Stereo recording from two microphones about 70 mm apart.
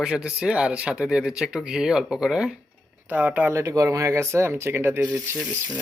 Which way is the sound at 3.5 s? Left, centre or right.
Right.